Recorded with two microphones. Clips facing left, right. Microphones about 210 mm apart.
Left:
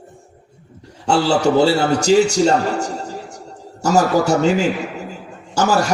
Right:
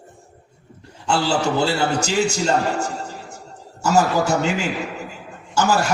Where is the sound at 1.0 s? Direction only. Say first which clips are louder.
Left 5 dB; 40° left (ahead or behind).